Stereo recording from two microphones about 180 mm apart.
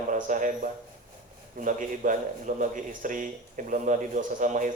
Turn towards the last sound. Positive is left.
turn(degrees=-45)  # may be behind; listen again after turning